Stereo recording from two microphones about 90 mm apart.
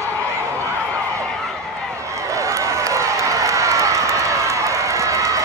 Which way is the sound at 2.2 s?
35° right (ahead or behind).